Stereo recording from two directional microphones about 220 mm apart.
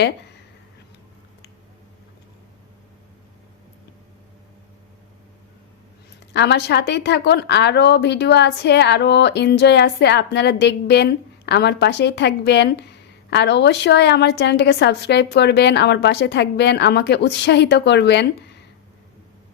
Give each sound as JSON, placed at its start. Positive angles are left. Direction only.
{"t": 6.3, "sound": "a woman's voice", "side_deg": 50}